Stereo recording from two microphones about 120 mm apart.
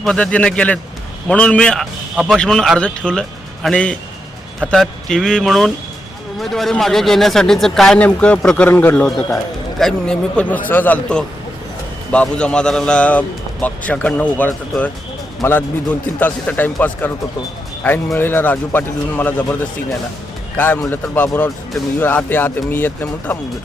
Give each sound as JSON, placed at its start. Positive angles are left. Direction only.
{"t": 0.0, "sound": "a man's voice", "side_deg": 5}
{"t": 17.8, "sound": "a man's voice", "side_deg": 20}
{"t": 20.8, "sound": "a man's voice", "side_deg": 20}